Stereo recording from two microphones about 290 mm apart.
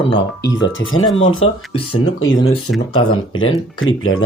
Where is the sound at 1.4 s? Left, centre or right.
Centre.